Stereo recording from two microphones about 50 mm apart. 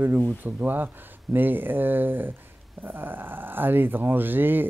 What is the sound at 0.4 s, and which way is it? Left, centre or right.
Speech, right.